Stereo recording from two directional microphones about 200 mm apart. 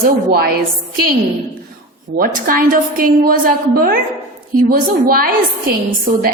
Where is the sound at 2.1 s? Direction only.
45° right (ahead or behind).